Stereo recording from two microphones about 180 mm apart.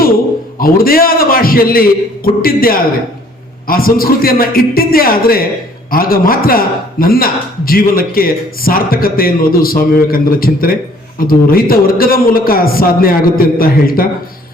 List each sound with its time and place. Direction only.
0.6 s a man's voice: 55° left (ahead or behind)